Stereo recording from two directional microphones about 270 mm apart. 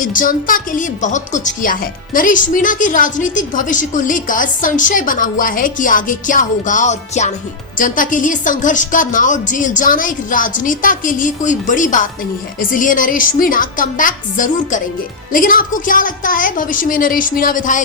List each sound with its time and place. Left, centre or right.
0.0 s a woman's voice: left